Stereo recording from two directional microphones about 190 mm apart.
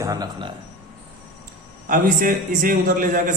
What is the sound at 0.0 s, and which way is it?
Speech, 20° right (ahead or behind).